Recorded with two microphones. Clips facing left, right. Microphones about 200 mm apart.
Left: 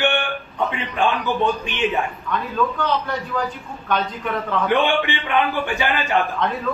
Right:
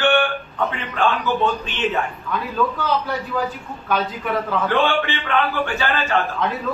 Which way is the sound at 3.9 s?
5° right (ahead or behind).